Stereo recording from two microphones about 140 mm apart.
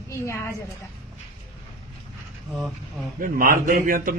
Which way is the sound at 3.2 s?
85° right.